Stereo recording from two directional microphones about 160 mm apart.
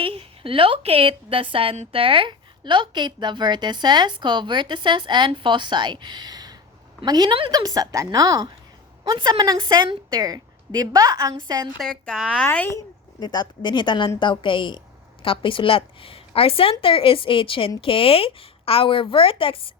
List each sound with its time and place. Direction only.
0.0 s a woman's voice: 35° right (ahead or behind)
11.8 s a child's voice: 5° left (ahead or behind)
13.1 s a woman's voice: 25° left (ahead or behind)